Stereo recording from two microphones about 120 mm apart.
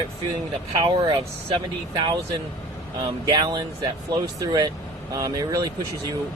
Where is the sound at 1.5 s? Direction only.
35° right (ahead or behind).